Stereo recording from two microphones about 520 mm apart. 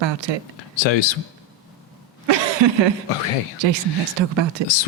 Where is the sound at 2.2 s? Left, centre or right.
Right.